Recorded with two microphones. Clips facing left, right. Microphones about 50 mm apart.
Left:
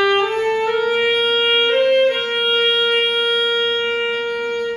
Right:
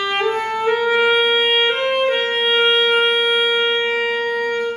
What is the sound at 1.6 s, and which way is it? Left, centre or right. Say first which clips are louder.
Music: left 3 dB; centre.